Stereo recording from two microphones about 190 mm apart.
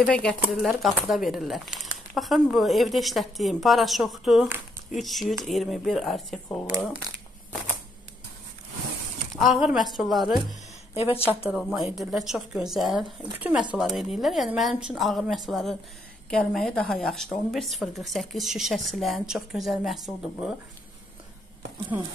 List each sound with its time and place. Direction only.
0.0 s speech: 5° left (ahead or behind)
9.3 s speech: centre (ahead or behind)
11.0 s speech: 30° left (ahead or behind)
11.4 s speech: 5° right (ahead or behind)